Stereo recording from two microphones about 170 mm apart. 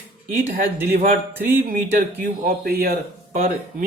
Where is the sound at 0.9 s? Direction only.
55° right (ahead or behind).